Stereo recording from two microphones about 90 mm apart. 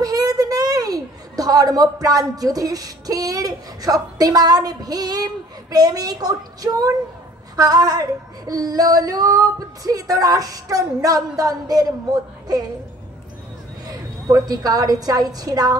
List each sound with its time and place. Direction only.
0.0 s a woman's voice: 45° right (ahead or behind)
7.5 s female singing: 45° right (ahead or behind)
13.8 s a woman's voice: 45° right (ahead or behind)